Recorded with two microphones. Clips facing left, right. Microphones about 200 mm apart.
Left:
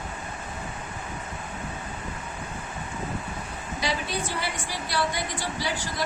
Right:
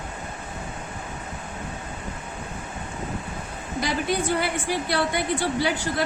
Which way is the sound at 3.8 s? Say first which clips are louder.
Right 5 dB; 55° right (ahead or behind).